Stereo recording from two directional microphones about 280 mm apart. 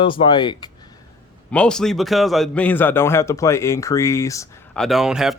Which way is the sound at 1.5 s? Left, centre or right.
Centre.